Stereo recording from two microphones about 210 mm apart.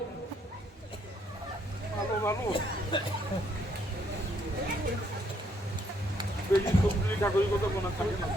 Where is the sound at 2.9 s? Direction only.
25° left (ahead or behind).